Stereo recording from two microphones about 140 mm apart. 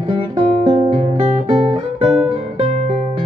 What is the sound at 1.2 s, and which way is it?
Guitar, 40° right (ahead or behind).